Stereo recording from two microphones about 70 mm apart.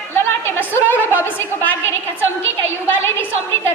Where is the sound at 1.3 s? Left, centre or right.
Left.